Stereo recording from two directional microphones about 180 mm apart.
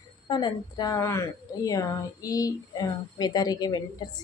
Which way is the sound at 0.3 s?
25° left (ahead or behind).